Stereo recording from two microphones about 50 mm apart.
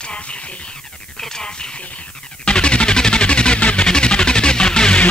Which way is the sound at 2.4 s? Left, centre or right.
Left.